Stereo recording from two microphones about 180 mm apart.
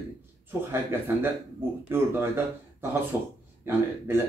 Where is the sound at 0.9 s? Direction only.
15° right (ahead or behind).